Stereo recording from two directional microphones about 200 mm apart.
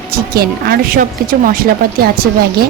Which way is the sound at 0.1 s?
50° right (ahead or behind).